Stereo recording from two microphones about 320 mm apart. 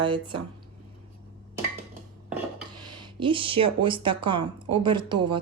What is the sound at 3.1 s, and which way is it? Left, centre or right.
A woman's voice, centre.